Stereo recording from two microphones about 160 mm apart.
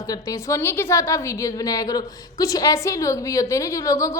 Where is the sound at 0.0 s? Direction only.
20° left (ahead or behind).